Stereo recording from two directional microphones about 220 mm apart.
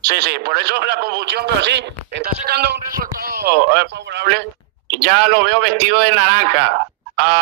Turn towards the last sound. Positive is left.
turn(degrees=-50)  # may be behind; listen again after turning